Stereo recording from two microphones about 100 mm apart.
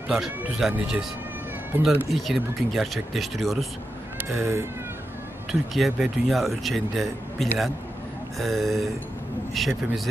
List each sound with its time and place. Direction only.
0.6 s a man's voice: centre (ahead or behind)
1.7 s speech: 20° right (ahead or behind)
2.0 s a man's voice: centre (ahead or behind)
4.4 s speech: 25° right (ahead or behind)
5.5 s a man's voice: 5° right (ahead or behind)